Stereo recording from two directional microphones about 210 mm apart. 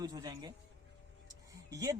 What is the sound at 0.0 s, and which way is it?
Speech, 20° right (ahead or behind).